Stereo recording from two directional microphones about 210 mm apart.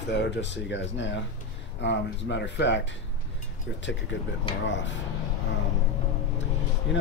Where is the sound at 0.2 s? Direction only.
60° left (ahead or behind).